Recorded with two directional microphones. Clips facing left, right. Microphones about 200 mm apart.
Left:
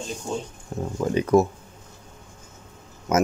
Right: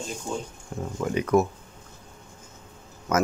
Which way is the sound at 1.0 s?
30° left (ahead or behind).